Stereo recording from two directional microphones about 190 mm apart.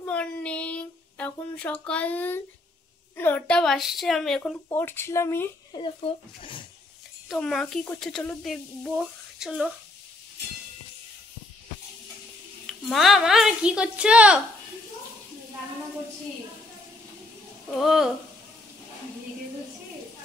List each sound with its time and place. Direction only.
0.0 s a sound: 5° left (ahead or behind)
3.2 s speech: 10° left (ahead or behind)
5.8 s speech: 30° left (ahead or behind)
7.2 s speech: centre (ahead or behind)
12.6 s speech: centre (ahead or behind)
17.6 s speech: centre (ahead or behind)